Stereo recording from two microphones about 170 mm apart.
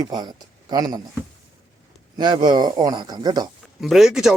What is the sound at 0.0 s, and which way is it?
A man's voice, 25° right (ahead or behind).